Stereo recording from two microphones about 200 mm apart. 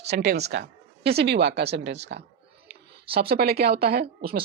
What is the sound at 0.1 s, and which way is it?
Speech, 55° right (ahead or behind).